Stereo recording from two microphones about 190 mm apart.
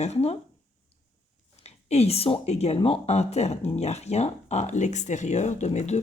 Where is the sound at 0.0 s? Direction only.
35° left (ahead or behind).